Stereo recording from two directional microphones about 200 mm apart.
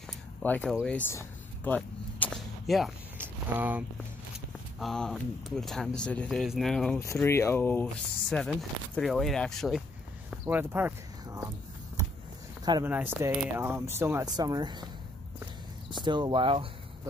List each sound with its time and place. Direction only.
0.4 s speech: 5° left (ahead or behind)
0.8 s whip: 10° left (ahead or behind)
3.2 s a sound: 10° right (ahead or behind)
4.7 s speech: centre (ahead or behind)
7.0 s speech: 15° left (ahead or behind)
10.3 s a sound: 10° right (ahead or behind)
12.8 s speech: 10° right (ahead or behind)
16.0 s speech: 25° right (ahead or behind)